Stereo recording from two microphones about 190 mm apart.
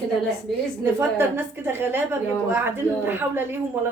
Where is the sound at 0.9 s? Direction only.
10° right (ahead or behind).